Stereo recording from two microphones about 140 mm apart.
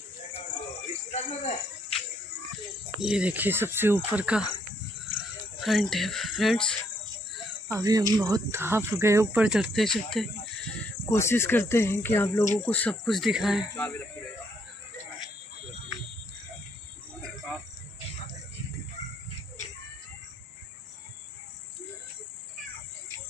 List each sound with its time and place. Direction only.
1.1 s snake: 55° left (ahead or behind)
3.0 s speech: 5° right (ahead or behind)
5.6 s speech: centre (ahead or behind)
7.6 s speech: 20° right (ahead or behind)
8.5 s speech: 15° right (ahead or behind)
9.4 s speech: 5° right (ahead or behind)
11.1 s speech: 20° left (ahead or behind); by 13.7 s 5° right (ahead or behind)
17.2 s cricket: centre (ahead or behind)